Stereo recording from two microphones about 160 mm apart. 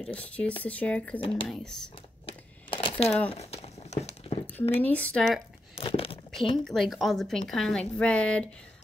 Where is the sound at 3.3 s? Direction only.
40° left (ahead or behind).